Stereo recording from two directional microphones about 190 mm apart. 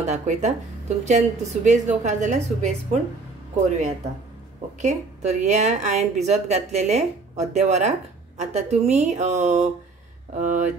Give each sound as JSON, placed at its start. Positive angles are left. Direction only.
{"t": 0.0, "sound": "a woman's voice", "side_deg": -35}
{"t": 4.8, "sound": "a woman's voice", "side_deg": -40}